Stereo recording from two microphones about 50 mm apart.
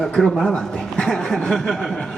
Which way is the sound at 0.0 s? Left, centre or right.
Centre.